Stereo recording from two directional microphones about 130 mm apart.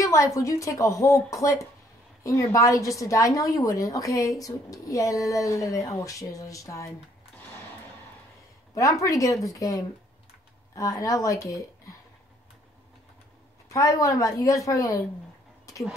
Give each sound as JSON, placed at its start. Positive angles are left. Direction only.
{"t": 0.0, "sound": "a woman's voice", "side_deg": 25}
{"t": 9.0, "sound": "a woman's voice", "side_deg": 25}
{"t": 13.7, "sound": "a woman's voice", "side_deg": 25}